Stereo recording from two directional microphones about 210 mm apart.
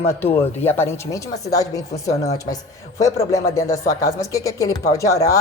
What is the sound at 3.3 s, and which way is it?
Speech, 15° left (ahead or behind).